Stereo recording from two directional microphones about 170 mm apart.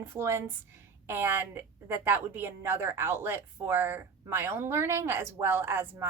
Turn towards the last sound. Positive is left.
turn(degrees=-15)  # may be behind; listen again after turning